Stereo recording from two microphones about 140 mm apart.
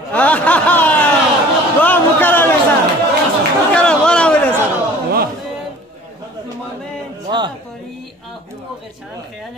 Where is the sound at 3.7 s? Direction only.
5° left (ahead or behind).